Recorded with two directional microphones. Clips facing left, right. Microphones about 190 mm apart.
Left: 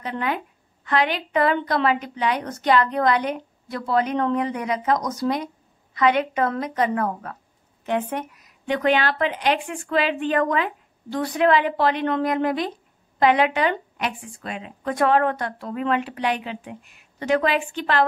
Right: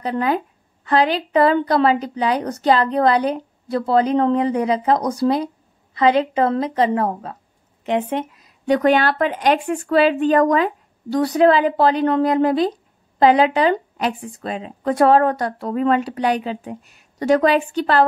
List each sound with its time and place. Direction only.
0.0 s a woman's voice: 35° right (ahead or behind)
7.8 s a sound: 20° right (ahead or behind)
8.7 s a woman's voice: 45° right (ahead or behind)